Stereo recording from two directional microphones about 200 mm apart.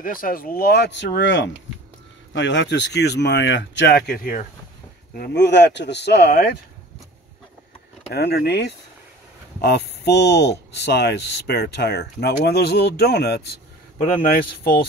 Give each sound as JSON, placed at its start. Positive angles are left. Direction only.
{"t": 0.0, "sound": "speech", "side_deg": 45}
{"t": 8.1, "sound": "a man's voice", "side_deg": 55}